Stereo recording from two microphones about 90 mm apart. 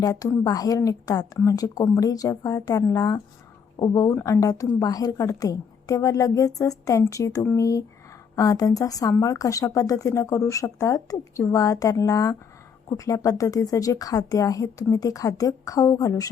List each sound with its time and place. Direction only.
0.0 s a woman's voice: 40° left (ahead or behind)